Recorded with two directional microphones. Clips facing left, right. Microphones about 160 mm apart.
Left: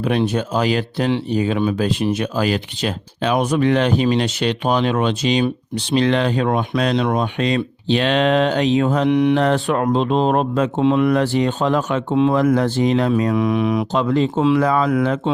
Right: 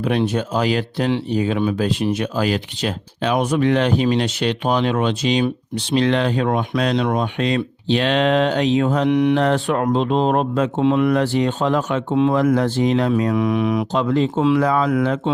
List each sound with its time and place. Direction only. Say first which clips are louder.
0.0 s speech: left 1 dB; 45° left (ahead or behind)
9.0 s speech: left 1 dB; 25° left (ahead or behind)
9.4 s speech: left 1 dB; 40° left (ahead or behind)
10.8 s speech: left 1 dB; 25° left (ahead or behind)
11.1 s speech: left 1 dB; 45° left (ahead or behind)
12.1 s speech: left 1 dB; 25° left (ahead or behind)
12.4 s speech: left 1 dB; 45° left (ahead or behind)
13.2 s speech: left 1 dB; 25° left (ahead or behind)
14.6 s speech: left 1 dB; 50° left (ahead or behind)